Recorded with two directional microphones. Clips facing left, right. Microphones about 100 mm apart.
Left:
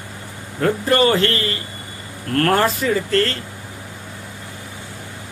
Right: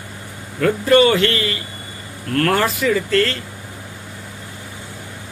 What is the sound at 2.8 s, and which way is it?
Speech, 35° left (ahead or behind).